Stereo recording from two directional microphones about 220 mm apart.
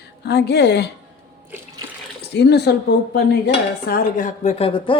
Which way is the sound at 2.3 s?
50° left (ahead or behind).